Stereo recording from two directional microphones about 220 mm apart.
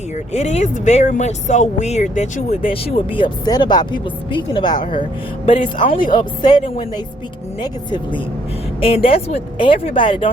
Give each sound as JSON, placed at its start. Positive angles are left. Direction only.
{"t": 0.3, "sound": "speech", "side_deg": 30}